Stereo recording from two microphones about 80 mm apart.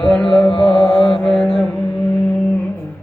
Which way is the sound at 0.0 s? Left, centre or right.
Centre.